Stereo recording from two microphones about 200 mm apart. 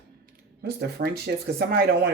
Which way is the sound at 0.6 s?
50° right (ahead or behind).